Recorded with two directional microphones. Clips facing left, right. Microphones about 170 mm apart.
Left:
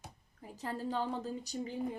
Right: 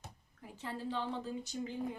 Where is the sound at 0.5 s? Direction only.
40° left (ahead or behind).